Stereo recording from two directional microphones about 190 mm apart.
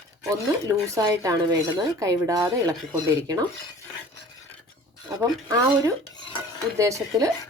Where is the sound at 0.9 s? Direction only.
20° right (ahead or behind).